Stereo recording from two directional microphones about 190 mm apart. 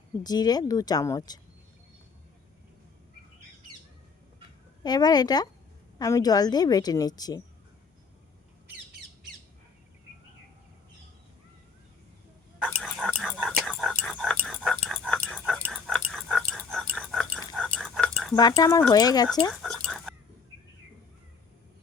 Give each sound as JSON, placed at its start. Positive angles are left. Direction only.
{"t": 0.2, "sound": "a woman's voice", "side_deg": 20}
{"t": 4.8, "sound": "a woman's voice", "side_deg": 20}
{"t": 12.5, "sound": "a sound", "side_deg": 5}
{"t": 13.1, "sound": "whispering", "side_deg": 0}
{"t": 13.6, "sound": "dog", "side_deg": 0}
{"t": 16.6, "sound": "a sound", "side_deg": 5}
{"t": 18.3, "sound": "a woman's voice", "side_deg": 20}
{"t": 19.5, "sound": "dog", "side_deg": 0}